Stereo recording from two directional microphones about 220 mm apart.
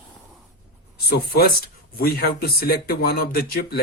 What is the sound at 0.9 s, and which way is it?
Speech, 45° left (ahead or behind).